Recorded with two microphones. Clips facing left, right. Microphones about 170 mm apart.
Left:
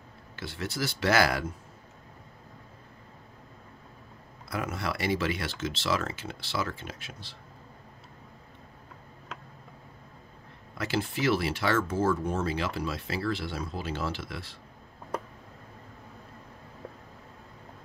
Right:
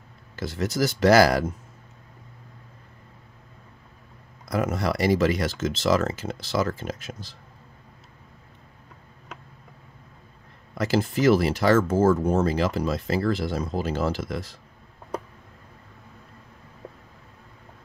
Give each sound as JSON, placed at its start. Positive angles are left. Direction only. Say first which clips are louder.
{"t": 0.4, "sound": "speech", "louder": "right 8 dB", "side_deg": -40}
{"t": 4.5, "sound": "speech", "louder": "right 8 dB", "side_deg": -40}
{"t": 10.7, "sound": "speech", "louder": "right 7 dB", "side_deg": -40}